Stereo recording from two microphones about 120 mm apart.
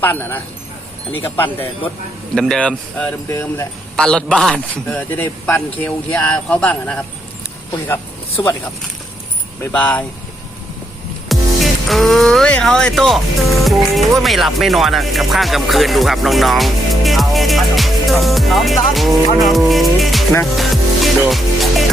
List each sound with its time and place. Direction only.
0.0 s a man's voice: 15° left (ahead or behind)
2.3 s a man's voice: 5° left (ahead or behind)
3.2 s speech: 20° left (ahead or behind)
3.9 s a man's voice: 5° left (ahead or behind)
9.6 s a man's voice: 15° left (ahead or behind)
11.3 s speech: centre (ahead or behind)
20.6 s music: centre (ahead or behind)